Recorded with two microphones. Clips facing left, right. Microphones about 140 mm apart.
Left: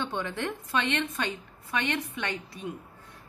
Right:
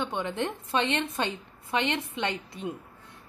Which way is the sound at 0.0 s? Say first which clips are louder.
Right 2 dB; 15° right (ahead or behind).